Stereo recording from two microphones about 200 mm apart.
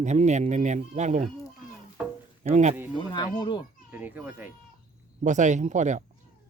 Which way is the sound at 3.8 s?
10° right (ahead or behind).